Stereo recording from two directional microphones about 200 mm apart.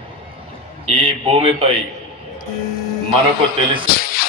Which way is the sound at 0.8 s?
25° right (ahead or behind).